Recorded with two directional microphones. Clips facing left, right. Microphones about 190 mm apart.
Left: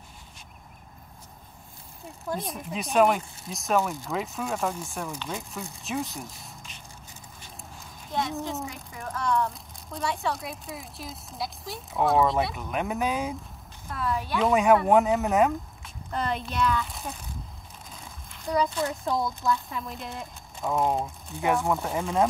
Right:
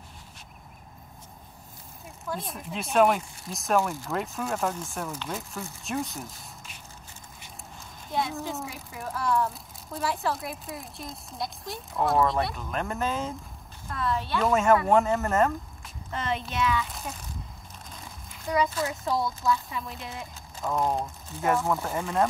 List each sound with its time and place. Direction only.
2.3 s speech: centre (ahead or behind)
8.1 s speech: centre (ahead or behind)
12.5 s speech: 10° left (ahead or behind)
14.9 s speech: centre (ahead or behind)